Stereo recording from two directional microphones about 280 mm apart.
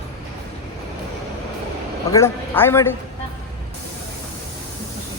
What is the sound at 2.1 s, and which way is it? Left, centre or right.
Speech, centre.